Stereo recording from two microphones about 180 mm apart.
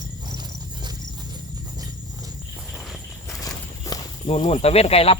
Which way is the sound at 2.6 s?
Centre (ahead or behind).